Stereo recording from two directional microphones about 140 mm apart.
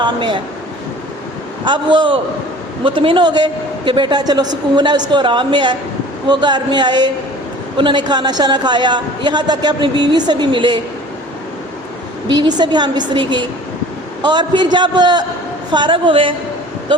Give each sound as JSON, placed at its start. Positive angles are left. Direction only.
{"t": 0.0, "sound": "a man's voice", "side_deg": -35}
{"t": 1.6, "sound": "a man's voice", "side_deg": -35}
{"t": 12.4, "sound": "a man's voice", "side_deg": -30}